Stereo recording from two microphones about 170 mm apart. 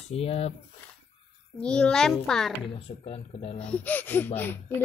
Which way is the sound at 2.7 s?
35° left (ahead or behind).